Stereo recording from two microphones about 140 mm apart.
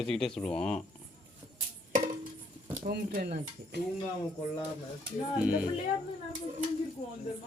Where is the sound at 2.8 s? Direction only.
85° right.